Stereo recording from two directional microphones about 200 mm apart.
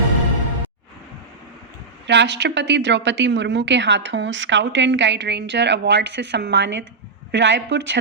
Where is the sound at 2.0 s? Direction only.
60° right (ahead or behind).